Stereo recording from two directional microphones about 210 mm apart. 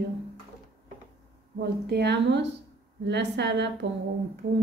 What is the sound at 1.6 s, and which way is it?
Speech, 50° right (ahead or behind).